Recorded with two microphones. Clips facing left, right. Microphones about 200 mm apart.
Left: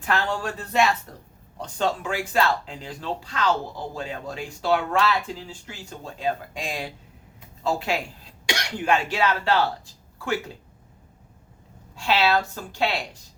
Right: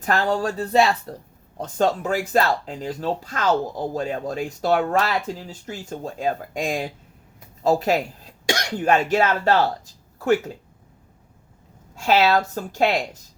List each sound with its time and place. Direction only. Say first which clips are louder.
0.0 s speech: right 4 dB; 40° right (ahead or behind)
11.9 s speech: right 4 dB; 45° right (ahead or behind)